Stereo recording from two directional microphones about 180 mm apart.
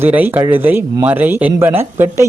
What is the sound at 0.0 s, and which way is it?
Speech, 10° right (ahead or behind).